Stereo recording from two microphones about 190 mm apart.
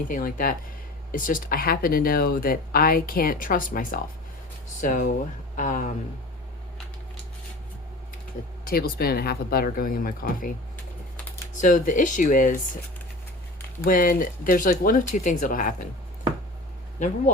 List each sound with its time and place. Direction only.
0.1 s speech: 45° left (ahead or behind)
8.6 s speech: 50° left (ahead or behind)
11.5 s speech: 40° left (ahead or behind)
13.8 s speech: 45° left (ahead or behind)